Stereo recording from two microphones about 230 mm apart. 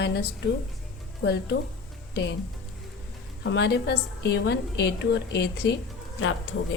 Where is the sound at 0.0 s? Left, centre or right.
Left.